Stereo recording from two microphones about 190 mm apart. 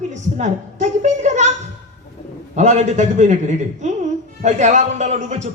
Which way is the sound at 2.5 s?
40° right (ahead or behind).